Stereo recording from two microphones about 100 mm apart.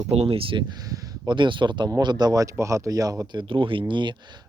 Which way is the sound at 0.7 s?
40° right (ahead or behind).